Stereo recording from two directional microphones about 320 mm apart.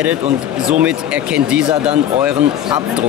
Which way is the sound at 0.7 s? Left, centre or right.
Centre.